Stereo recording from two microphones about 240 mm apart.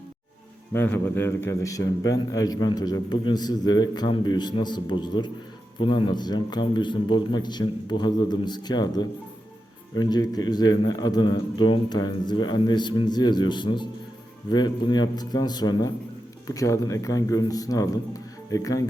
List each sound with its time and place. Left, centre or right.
0.7 s a man's voice: centre